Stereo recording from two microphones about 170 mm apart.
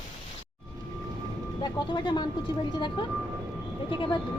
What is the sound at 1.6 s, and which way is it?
Speech, 25° left (ahead or behind).